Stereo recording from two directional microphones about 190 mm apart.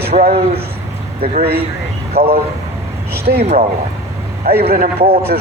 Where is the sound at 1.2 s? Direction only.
55° right (ahead or behind).